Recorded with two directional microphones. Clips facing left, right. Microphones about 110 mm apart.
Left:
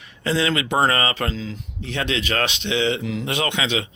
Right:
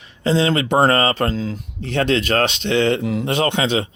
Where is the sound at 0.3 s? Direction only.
30° right (ahead or behind).